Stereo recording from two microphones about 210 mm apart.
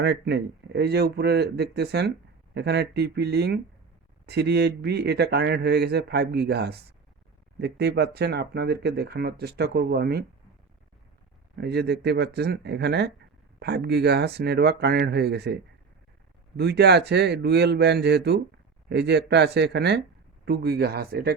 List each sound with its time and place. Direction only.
0.0 s speech: 55° right (ahead or behind)
11.5 s speech: 50° right (ahead or behind)
16.6 s speech: 50° right (ahead or behind)